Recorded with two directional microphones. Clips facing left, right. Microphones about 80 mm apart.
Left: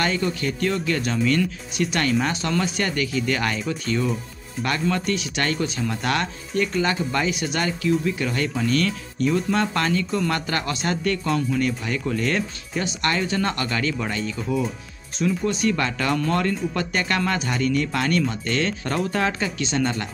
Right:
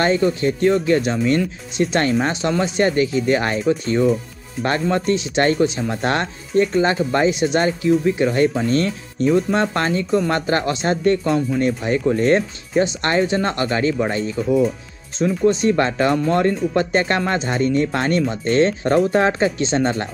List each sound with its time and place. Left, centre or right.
0.0 s speech: right